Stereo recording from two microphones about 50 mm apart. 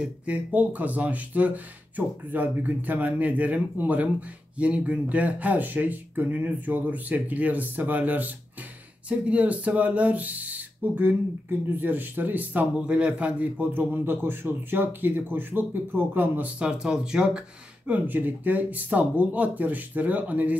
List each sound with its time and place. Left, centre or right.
0.0 s speech: right
12.7 s a man's voice: right
13.7 s speech: right
16.5 s speech: centre
17.8 s speech: right